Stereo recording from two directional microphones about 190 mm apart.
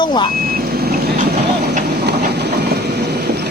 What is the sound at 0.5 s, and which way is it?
Vehicle, 50° right (ahead or behind).